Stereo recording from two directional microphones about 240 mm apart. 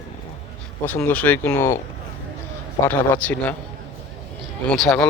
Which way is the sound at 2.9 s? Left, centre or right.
Centre.